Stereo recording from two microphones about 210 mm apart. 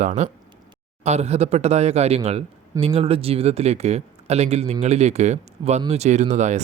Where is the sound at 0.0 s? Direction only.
35° right (ahead or behind).